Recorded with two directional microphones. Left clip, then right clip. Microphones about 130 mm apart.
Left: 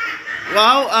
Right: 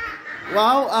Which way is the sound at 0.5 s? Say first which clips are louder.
Left 4 dB; 40° right (ahead or behind).